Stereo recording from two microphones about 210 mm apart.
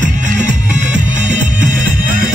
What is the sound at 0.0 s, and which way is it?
Music, 35° right (ahead or behind).